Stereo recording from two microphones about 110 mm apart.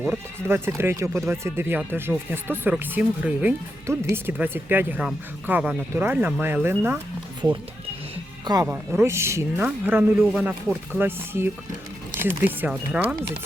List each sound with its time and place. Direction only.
0.4 s speech: 20° right (ahead or behind)
8.6 s speech: 15° right (ahead or behind)